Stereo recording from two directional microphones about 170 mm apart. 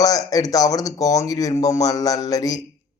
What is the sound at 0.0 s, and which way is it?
A man's voice, 20° left (ahead or behind).